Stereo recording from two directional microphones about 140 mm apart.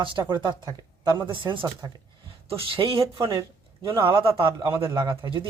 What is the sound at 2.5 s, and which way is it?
Speech, 40° right (ahead or behind).